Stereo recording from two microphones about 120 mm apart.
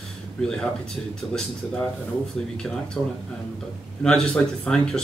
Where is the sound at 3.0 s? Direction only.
10° left (ahead or behind).